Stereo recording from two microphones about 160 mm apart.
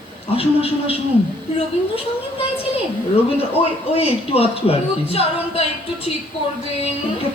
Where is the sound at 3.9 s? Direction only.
40° left (ahead or behind).